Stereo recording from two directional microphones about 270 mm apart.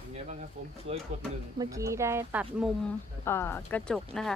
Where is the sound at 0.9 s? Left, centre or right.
Right.